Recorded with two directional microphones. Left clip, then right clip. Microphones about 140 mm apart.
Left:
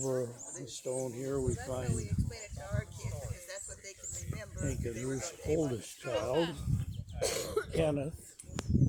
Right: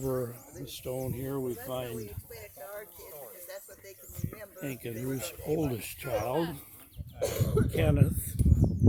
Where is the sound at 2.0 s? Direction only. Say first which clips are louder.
Even; 20° right (ahead or behind).